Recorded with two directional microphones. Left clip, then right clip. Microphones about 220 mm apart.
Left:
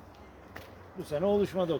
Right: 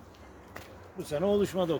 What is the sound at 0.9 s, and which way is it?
Speech, 20° right (ahead or behind).